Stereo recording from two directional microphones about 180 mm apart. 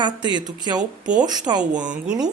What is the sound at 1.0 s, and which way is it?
Speech, 5° right (ahead or behind).